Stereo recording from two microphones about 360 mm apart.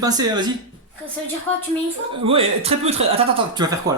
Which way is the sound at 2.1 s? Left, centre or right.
Centre.